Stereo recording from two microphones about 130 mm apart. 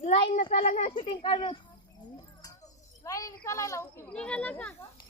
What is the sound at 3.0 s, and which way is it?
Speech, 25° left (ahead or behind).